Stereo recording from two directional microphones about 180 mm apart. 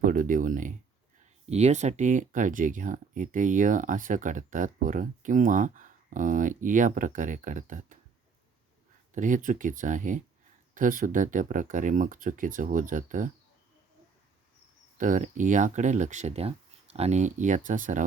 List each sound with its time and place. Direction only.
0.0 s speech: 50° right (ahead or behind)
9.1 s speech: 45° right (ahead or behind)
14.9 s speech: 45° right (ahead or behind)